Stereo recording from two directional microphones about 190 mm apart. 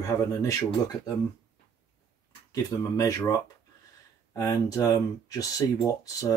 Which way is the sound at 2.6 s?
20° left (ahead or behind).